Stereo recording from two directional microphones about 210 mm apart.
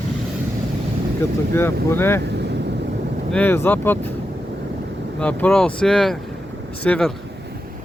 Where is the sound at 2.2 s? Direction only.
55° right (ahead or behind).